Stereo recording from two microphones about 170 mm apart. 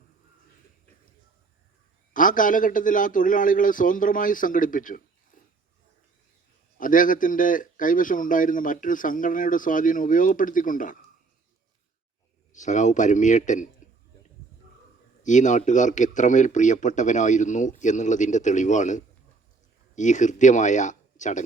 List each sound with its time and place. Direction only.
2.1 s a man's voice: 50° left (ahead or behind)
6.7 s a man's voice: 50° left (ahead or behind)
12.5 s a man's voice: 45° left (ahead or behind)
15.2 s a man's voice: 45° left (ahead or behind)